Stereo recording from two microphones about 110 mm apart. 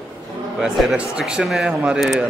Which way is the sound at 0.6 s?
5° right (ahead or behind).